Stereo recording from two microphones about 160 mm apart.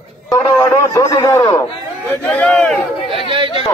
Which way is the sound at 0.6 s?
15° left (ahead or behind).